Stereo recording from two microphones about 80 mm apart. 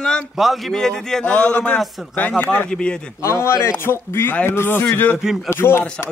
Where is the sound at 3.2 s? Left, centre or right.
Left.